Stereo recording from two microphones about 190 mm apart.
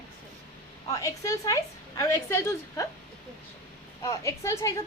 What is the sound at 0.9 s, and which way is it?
A woman's voice, 15° left (ahead or behind).